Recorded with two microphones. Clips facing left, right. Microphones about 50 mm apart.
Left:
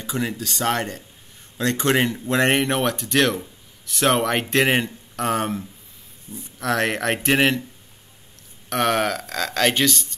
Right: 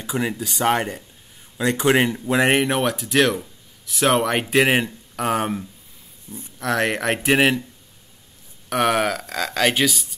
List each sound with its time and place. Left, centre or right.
0.0 s speech: centre
6.3 s speech: left
6.6 s speech: centre
8.6 s speech: centre